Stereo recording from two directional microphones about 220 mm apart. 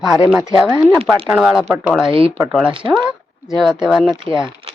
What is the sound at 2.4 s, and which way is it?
Speech, 5° right (ahead or behind).